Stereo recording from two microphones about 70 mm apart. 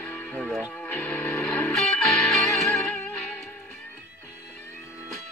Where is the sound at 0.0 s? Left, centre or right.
Left.